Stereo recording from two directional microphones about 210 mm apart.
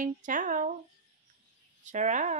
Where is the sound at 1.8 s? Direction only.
35° right (ahead or behind).